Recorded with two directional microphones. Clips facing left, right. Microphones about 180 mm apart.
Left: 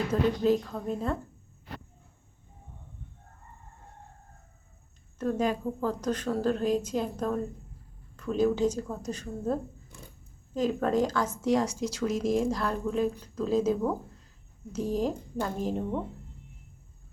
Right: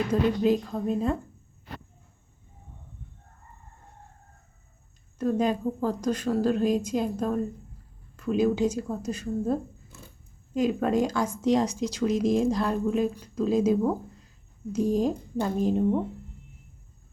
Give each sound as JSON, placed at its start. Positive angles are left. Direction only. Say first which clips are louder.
{"t": 0.1, "sound": "a woman's voice", "louder": "right 1 dB", "side_deg": -15}
{"t": 5.1, "sound": "a woman's voice", "louder": "right 3 dB", "side_deg": -15}